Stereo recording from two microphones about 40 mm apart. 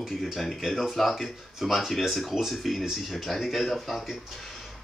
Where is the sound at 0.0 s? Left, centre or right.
Centre.